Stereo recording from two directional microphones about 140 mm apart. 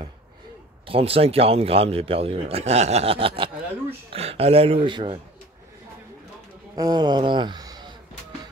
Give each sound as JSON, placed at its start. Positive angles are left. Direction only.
{"t": 0.8, "sound": "a man's voice", "side_deg": -45}
{"t": 6.7, "sound": "speech", "side_deg": -30}